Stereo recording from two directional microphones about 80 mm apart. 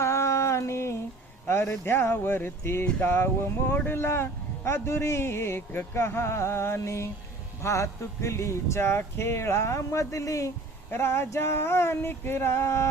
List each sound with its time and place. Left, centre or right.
0.0 s a sound: left
1.8 s speech: left
10.9 s speech: left